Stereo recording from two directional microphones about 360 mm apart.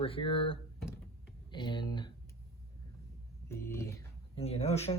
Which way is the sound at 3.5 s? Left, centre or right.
Centre.